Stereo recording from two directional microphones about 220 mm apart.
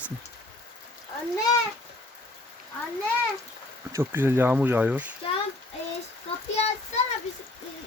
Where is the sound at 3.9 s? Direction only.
10° right (ahead or behind).